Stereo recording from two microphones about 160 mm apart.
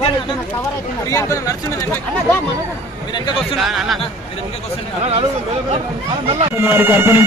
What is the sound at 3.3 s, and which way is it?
Speech, centre (ahead or behind).